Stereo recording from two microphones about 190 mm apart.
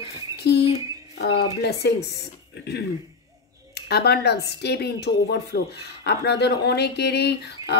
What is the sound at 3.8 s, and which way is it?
Speech, 60° left (ahead or behind).